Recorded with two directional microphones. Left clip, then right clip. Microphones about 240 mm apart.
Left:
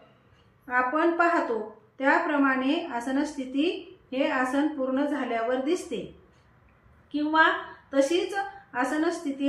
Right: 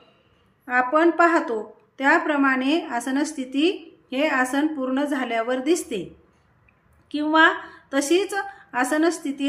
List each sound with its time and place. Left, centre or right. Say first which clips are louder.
0.6 s a woman's voice: right 5 dB; right
7.1 s a woman's voice: right 4 dB; right